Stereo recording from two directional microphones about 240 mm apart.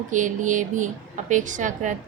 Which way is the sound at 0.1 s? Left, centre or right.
Right.